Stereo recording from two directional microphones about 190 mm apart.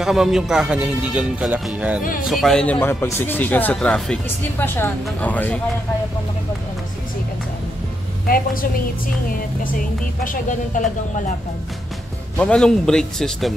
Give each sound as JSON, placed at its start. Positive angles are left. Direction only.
{"t": 0.0, "sound": "a man's voice", "side_deg": 0}
{"t": 9.8, "sound": "speech", "side_deg": 45}
{"t": 12.4, "sound": "a man's voice", "side_deg": 5}